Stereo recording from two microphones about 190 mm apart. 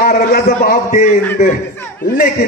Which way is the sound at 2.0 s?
50° left (ahead or behind).